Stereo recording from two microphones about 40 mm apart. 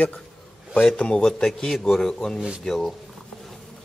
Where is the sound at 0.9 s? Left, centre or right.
Left; by 2.9 s centre.